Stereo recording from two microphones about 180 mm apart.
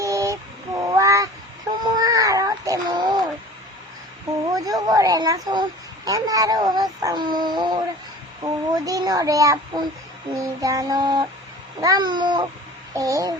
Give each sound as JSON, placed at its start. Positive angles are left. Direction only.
{"t": 0.0, "sound": "child singing", "side_deg": -15}
{"t": 1.8, "sound": "baby cry", "side_deg": -20}
{"t": 4.5, "sound": "a sound", "side_deg": -20}
{"t": 6.1, "sound": "a child's voice", "side_deg": -20}